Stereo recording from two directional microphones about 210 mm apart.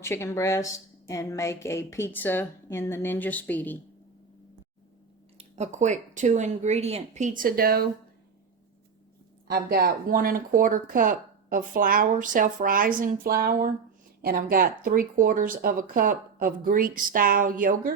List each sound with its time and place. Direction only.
0.0 s a woman's voice: 15° left (ahead or behind)
5.4 s speech: 30° right (ahead or behind)
9.5 s speech: 45° right (ahead or behind)